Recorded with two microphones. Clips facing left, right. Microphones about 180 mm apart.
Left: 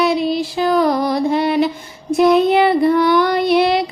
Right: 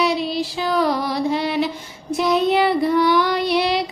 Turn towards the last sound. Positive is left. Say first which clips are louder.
# left 5 dB
turn(degrees=55)  # may be behind; listen again after turning